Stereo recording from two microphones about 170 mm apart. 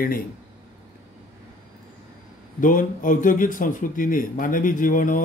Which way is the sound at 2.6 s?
50° left (ahead or behind).